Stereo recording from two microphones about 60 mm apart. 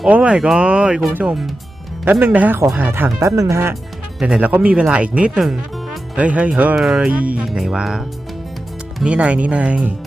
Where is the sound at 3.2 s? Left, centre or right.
Right.